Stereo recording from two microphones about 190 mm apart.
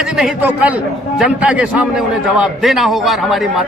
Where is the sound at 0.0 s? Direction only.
5° right (ahead or behind).